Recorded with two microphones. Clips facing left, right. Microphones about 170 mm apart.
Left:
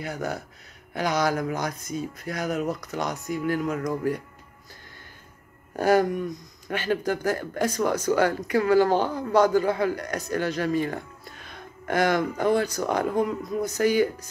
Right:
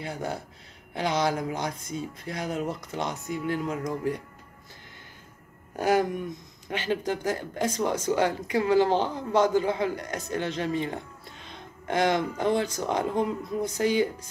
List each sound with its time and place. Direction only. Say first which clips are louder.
0.0 s speech: left 2 dB; 25° right (ahead or behind)
5.8 s speech: left 3 dB; 20° right (ahead or behind)